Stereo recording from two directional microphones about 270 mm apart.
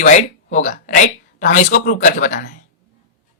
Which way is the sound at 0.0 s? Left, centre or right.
Left.